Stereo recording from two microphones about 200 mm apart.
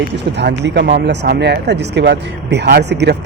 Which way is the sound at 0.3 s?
60° right (ahead or behind).